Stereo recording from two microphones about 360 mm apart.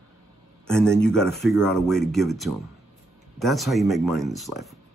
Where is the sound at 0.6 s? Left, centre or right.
Centre.